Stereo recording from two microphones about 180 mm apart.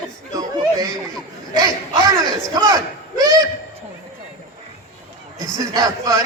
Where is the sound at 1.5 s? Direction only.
20° right (ahead or behind).